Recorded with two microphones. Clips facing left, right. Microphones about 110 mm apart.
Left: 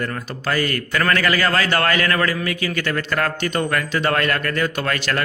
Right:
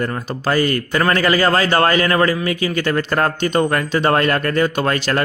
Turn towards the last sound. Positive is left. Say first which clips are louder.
# right 4 dB
turn(degrees=-25)  # may be behind; listen again after turning